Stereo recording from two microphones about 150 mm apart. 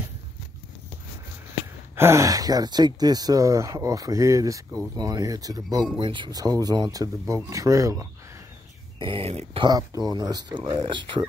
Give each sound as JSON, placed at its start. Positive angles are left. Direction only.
{"t": 2.0, "sound": "speech", "side_deg": -20}
{"t": 9.0, "sound": "speech", "side_deg": -40}
{"t": 9.7, "sound": "speech", "side_deg": -25}